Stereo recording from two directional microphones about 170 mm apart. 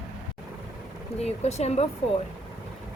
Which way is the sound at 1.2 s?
40° left (ahead or behind).